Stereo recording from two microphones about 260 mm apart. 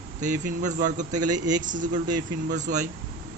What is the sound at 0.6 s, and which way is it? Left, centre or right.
Speech, right.